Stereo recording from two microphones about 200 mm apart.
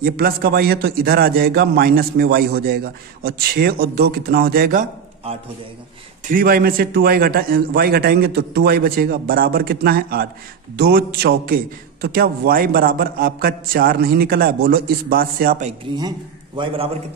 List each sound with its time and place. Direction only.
0.0 s a man's voice: 50° right (ahead or behind)
6.2 s a man's voice: 45° right (ahead or behind)
16.5 s a man's voice: 25° right (ahead or behind)